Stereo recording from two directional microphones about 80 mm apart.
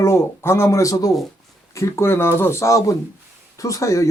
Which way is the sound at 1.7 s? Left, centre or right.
Left.